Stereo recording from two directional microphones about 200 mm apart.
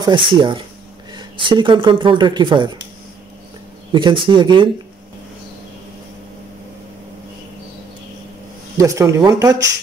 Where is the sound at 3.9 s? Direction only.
25° right (ahead or behind).